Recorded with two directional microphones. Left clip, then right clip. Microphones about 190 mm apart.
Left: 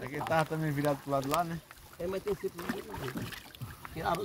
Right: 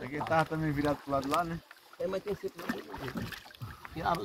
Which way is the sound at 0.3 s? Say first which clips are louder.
Right 1 dB; 55° left (ahead or behind).